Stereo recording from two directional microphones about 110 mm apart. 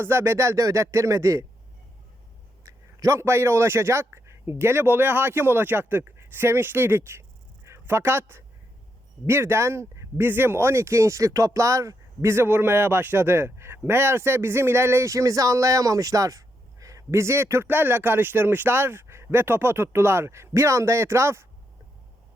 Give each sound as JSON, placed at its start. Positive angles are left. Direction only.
{"t": 0.0, "sound": "speech", "side_deg": -20}
{"t": 2.6, "sound": "a man's voice", "side_deg": -25}